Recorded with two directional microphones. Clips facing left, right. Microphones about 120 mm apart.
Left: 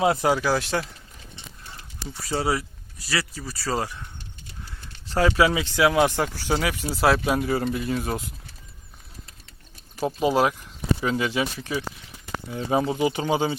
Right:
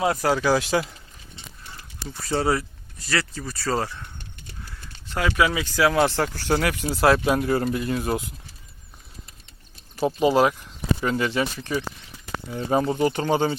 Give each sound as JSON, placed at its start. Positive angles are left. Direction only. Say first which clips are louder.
{"t": 0.0, "sound": "speech", "louder": "left 2 dB", "side_deg": 20}
{"t": 0.3, "sound": "speech", "louder": "right 1 dB", "side_deg": 5}
{"t": 2.0, "sound": "speech", "louder": "right 2 dB", "side_deg": 5}
{"t": 5.0, "sound": "speech", "louder": "left 2 dB", "side_deg": 35}
{"t": 10.1, "sound": "speech", "louder": "right 2 dB", "side_deg": 0}